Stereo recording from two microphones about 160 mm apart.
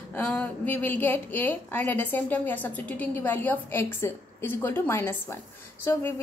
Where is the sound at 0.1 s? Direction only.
10° left (ahead or behind).